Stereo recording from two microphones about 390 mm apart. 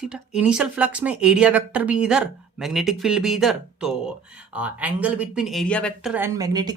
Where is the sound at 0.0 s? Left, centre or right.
Centre.